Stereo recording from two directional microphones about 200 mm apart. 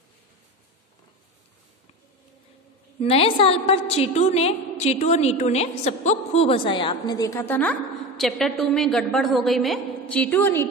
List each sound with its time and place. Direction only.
3.0 s a woman's voice: 30° left (ahead or behind); by 10.7 s 10° left (ahead or behind)